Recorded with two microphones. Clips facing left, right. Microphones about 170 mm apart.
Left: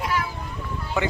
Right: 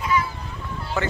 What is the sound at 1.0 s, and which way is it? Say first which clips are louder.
Speech: left 1 dB; 15° left (ahead or behind).